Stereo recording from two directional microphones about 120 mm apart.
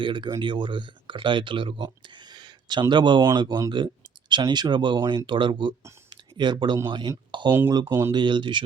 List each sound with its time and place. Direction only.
0.0 s speech: 40° right (ahead or behind)
2.3 s a sound: 40° right (ahead or behind)
2.9 s speech: 40° right (ahead or behind)
6.1 s a sound: 40° right (ahead or behind)
6.8 s speech: 40° right (ahead or behind)
7.9 s speech: 20° right (ahead or behind)
8.1 s speech: 40° right (ahead or behind)